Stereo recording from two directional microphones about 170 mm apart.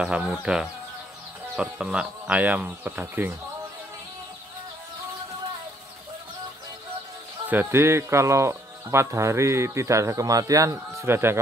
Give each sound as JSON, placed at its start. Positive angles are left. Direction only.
{"t": 0.0, "sound": "speech", "side_deg": -5}
{"t": 7.4, "sound": "speech", "side_deg": -15}